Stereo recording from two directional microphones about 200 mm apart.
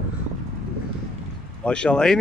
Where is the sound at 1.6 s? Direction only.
5° left (ahead or behind).